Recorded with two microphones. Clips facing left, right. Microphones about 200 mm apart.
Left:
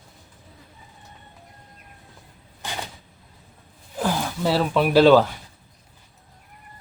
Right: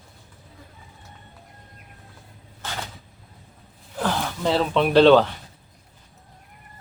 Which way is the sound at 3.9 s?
10° left (ahead or behind).